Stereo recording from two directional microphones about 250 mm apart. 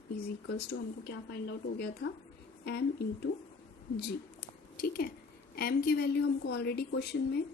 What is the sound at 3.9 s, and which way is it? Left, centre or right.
Speech, left.